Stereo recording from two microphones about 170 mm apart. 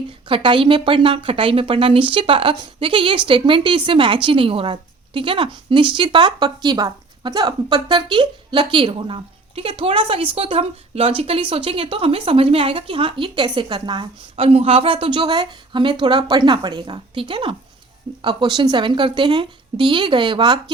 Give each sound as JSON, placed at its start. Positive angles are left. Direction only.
{"t": 0.3, "sound": "a woman's voice", "side_deg": -30}